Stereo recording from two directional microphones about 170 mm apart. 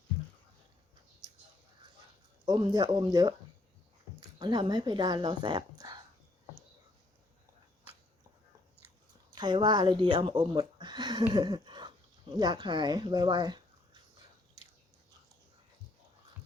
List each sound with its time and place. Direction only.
2.5 s speech: 25° right (ahead or behind)
9.3 s speech: 25° right (ahead or behind)